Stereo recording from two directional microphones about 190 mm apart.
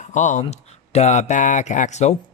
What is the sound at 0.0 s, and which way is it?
Speech, 40° left (ahead or behind).